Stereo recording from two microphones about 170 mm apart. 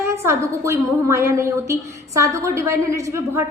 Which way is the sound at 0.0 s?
15° right (ahead or behind).